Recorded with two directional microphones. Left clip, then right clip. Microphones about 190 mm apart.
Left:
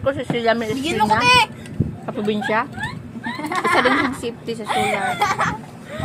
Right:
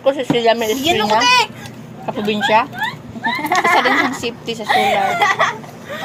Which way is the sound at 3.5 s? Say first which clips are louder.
Right 3 dB; 50° right (ahead or behind).